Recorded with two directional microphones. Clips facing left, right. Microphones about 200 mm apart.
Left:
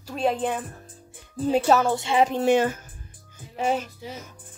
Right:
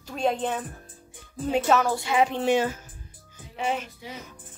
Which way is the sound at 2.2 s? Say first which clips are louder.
Left 3 dB; 40° left (ahead or behind).